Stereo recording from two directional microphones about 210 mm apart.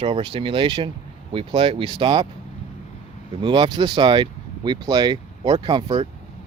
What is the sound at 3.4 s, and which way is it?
Speech, 25° right (ahead or behind).